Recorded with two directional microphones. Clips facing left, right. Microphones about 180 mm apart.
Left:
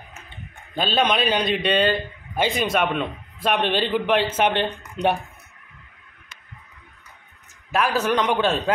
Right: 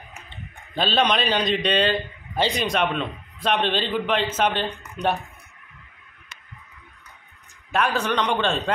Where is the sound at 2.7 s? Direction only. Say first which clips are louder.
Left 1 dB; 5° left (ahead or behind).